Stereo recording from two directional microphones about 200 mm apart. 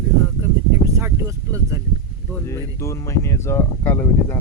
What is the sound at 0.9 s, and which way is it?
Speech, 15° right (ahead or behind).